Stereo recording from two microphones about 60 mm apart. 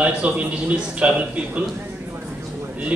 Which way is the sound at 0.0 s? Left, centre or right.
Right.